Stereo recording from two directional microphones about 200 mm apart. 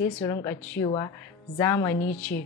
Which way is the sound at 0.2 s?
20° left (ahead or behind).